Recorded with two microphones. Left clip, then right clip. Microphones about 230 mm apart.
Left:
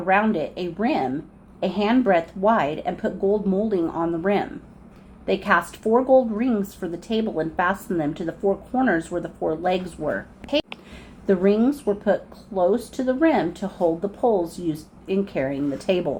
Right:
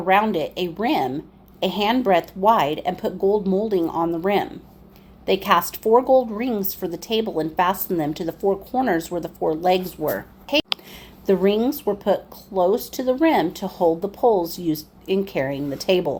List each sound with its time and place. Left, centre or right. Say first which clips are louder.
0.0 s a woman's voice: right 2 dB; right